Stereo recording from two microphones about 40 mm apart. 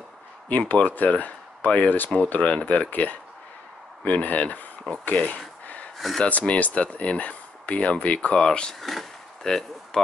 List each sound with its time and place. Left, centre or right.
0.5 s speech: left
8.4 s speech: centre